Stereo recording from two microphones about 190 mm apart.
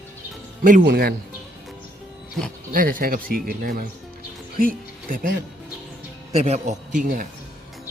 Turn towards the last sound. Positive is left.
turn(degrees=-45)  # may be behind; listen again after turning